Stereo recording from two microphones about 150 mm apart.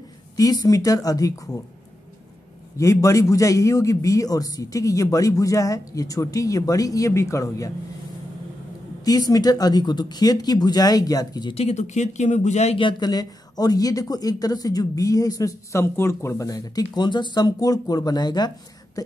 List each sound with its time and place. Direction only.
0.4 s speech: 25° left (ahead or behind)
2.8 s speech: 20° left (ahead or behind)
9.0 s speech: 25° left (ahead or behind)
11.5 s speech: 45° left (ahead or behind)
12.7 s speech: 30° left (ahead or behind)
19.0 s a sound: 25° left (ahead or behind)